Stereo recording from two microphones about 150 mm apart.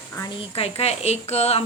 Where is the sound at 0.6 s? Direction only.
45° left (ahead or behind).